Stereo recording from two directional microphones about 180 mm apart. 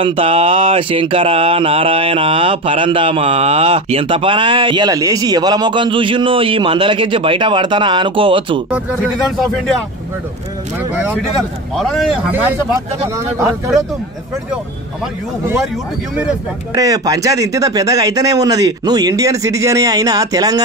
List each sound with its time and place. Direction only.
0.0 s speech: 30° right (ahead or behind)
8.7 s speech: 5° right (ahead or behind)
11.7 s speech: centre (ahead or behind)
12.3 s speech: 10° right (ahead or behind)
16.7 s speech: 20° right (ahead or behind)